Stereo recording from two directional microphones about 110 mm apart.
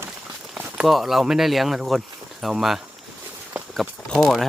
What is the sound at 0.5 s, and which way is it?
Speech, 10° right (ahead or behind).